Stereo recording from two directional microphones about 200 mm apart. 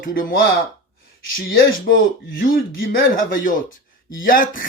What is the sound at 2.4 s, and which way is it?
Speech, 45° left (ahead or behind).